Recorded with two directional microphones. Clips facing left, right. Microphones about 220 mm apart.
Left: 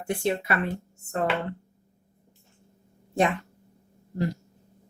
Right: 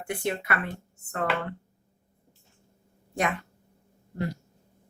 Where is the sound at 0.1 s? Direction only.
25° left (ahead or behind).